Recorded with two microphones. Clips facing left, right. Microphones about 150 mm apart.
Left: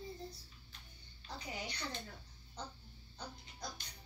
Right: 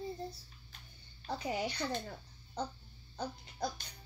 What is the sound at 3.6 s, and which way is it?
Speech, 60° right (ahead or behind).